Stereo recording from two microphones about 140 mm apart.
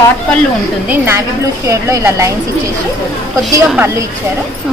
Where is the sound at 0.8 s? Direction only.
15° right (ahead or behind).